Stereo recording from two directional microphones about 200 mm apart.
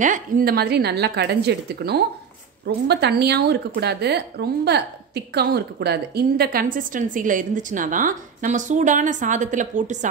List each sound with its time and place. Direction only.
0.0 s speech: 40° right (ahead or behind)